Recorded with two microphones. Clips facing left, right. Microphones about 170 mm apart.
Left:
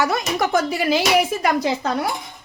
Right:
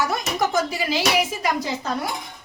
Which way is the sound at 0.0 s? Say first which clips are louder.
Left 3 dB; 70° left (ahead or behind).